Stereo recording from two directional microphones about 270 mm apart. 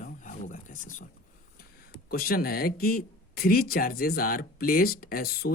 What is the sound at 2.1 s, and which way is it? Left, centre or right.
Speech, left.